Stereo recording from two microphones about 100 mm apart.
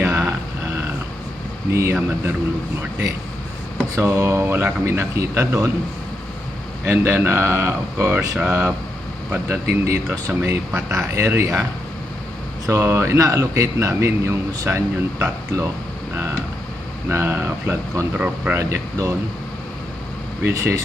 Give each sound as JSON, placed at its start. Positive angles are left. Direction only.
{"t": 0.0, "sound": "a sound", "side_deg": -25}
{"t": 1.7, "sound": "a man's voice", "side_deg": -25}
{"t": 3.9, "sound": "a man's voice", "side_deg": -25}
{"t": 6.8, "sound": "a man's voice", "side_deg": -25}
{"t": 12.6, "sound": "a man's voice", "side_deg": -30}
{"t": 17.1, "sound": "a man's voice", "side_deg": -25}
{"t": 20.4, "sound": "a man's voice", "side_deg": -30}